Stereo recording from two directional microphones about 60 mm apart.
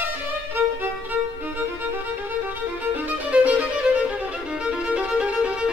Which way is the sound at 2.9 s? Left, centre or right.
Right.